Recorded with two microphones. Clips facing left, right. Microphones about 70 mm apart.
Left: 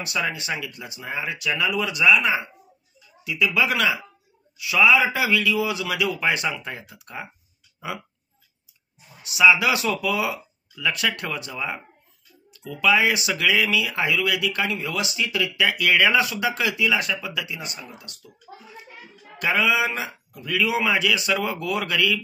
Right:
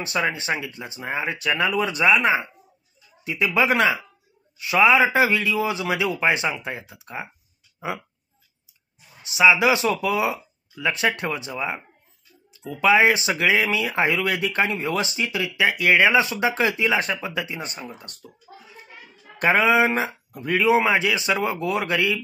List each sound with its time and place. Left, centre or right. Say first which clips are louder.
0.0 s speech: right 3 dB; right
9.2 s speech: right 1 dB; right
19.4 s speech: right 4 dB; right